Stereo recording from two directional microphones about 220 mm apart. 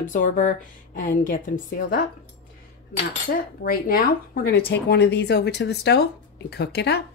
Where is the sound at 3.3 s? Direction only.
40° left (ahead or behind).